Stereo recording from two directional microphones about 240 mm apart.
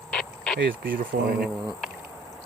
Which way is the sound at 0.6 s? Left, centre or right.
Right.